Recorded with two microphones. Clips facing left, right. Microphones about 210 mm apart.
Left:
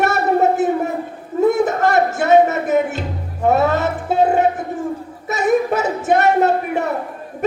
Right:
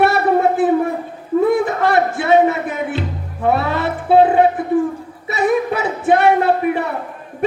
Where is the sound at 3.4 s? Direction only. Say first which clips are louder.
Left 2 dB; 45° left (ahead or behind).